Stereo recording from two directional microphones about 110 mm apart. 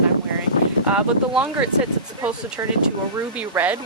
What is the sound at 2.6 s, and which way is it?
Speech, 25° right (ahead or behind).